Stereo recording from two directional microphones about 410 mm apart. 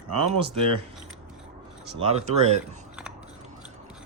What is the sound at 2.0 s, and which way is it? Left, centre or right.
Speech, centre.